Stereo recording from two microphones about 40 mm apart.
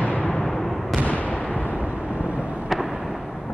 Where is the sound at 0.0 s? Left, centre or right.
Left.